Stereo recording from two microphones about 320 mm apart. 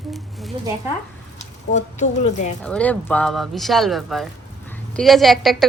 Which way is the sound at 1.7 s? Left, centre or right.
Left.